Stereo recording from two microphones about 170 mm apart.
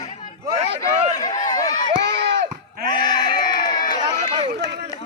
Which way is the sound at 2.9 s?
25° left (ahead or behind).